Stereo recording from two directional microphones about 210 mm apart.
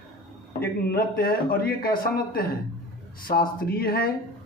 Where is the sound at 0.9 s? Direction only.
45° left (ahead or behind).